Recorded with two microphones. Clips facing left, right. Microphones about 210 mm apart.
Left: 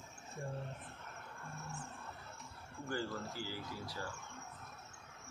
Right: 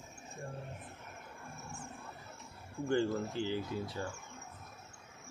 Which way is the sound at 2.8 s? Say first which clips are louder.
Right 9 dB; 25° right (ahead or behind).